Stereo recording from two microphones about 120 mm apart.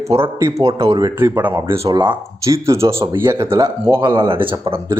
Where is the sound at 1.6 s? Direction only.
55° right (ahead or behind).